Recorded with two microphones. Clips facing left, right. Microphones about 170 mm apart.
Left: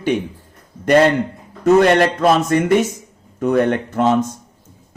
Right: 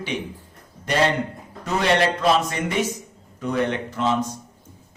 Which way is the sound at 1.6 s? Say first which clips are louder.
Left 9 dB; 50° left (ahead or behind).